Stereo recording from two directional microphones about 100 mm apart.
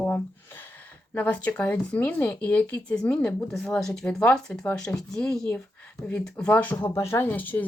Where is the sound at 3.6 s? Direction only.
5° left (ahead or behind).